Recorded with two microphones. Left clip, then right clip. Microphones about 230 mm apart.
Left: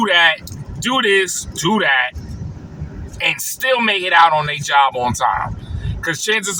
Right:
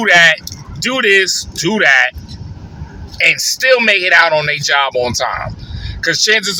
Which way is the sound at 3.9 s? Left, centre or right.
Left.